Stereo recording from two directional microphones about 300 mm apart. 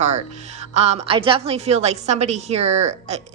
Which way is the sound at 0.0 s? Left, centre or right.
Right.